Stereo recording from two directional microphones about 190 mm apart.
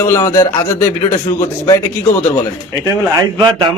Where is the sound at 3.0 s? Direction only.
15° right (ahead or behind).